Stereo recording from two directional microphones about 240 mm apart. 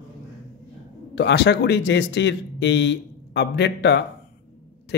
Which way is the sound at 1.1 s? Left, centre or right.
Left.